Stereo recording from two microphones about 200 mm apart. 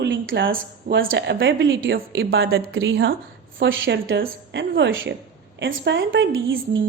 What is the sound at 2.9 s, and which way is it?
Speech, 55° right (ahead or behind).